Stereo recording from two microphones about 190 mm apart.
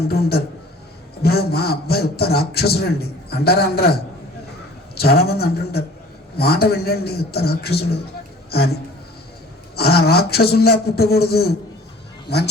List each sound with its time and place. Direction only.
0.1 s a man's voice: 55° left (ahead or behind)
9.7 s a man's voice: 55° left (ahead or behind)